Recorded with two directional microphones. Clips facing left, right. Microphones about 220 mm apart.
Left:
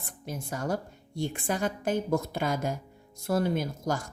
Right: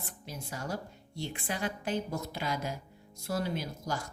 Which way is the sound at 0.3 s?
50° left (ahead or behind).